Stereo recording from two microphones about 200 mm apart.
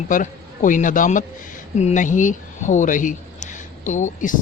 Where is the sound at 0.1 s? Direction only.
40° left (ahead or behind).